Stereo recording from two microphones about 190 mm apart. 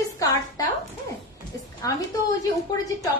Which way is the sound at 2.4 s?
15° left (ahead or behind).